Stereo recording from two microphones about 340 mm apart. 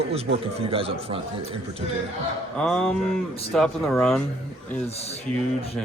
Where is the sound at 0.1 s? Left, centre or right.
Centre.